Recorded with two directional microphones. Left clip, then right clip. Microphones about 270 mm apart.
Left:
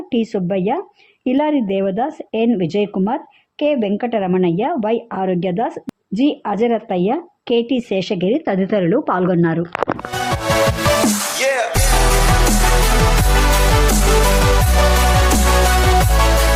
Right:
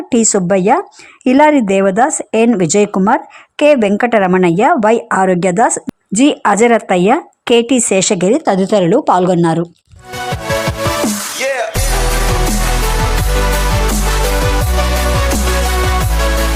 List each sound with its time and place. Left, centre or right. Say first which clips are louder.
0.1 s speech: right 8 dB; right
10.6 s music: left 3 dB; centre